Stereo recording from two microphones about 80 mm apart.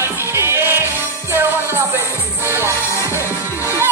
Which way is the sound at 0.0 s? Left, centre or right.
Right.